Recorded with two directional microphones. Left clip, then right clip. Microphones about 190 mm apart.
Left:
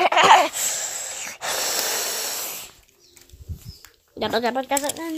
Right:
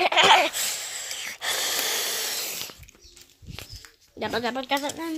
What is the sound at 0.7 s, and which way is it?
Wheeze, 15° left (ahead or behind).